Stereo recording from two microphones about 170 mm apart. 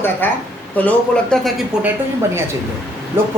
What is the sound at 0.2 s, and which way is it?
A man's voice, 10° left (ahead or behind).